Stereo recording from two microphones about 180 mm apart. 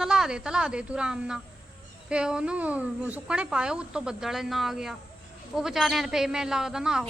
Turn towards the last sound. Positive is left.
turn(degrees=-5)  # may be behind; listen again after turning